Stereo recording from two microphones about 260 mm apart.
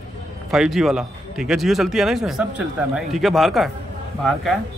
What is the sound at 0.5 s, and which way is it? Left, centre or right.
Speech, centre.